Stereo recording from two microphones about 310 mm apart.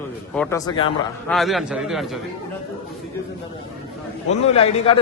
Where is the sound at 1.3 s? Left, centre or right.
Centre.